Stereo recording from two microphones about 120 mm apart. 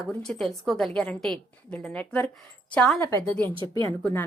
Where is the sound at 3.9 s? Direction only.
15° left (ahead or behind).